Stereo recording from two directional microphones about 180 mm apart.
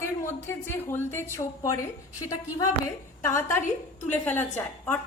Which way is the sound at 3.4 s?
15° left (ahead or behind).